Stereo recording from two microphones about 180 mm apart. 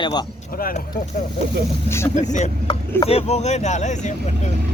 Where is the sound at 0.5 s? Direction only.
55° left (ahead or behind).